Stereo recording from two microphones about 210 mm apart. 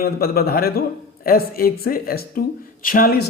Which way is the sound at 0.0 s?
45° left (ahead or behind).